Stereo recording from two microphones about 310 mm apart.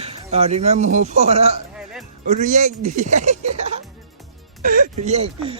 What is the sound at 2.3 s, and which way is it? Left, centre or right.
Speech, right.